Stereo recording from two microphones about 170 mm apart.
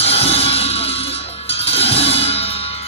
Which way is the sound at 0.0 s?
35° left (ahead or behind).